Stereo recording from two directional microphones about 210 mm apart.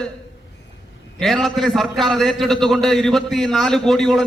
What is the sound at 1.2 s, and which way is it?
A man's voice, centre (ahead or behind).